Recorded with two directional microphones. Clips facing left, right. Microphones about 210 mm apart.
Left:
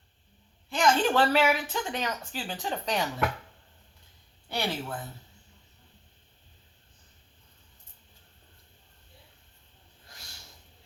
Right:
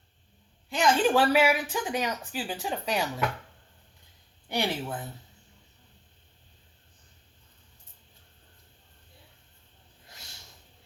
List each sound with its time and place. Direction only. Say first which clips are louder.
0.7 s speech: right 1 dB; 10° right (ahead or behind)
4.4 s speech: right 2 dB; 15° right (ahead or behind)